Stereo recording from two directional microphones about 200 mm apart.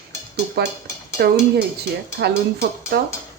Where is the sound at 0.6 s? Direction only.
55° right (ahead or behind).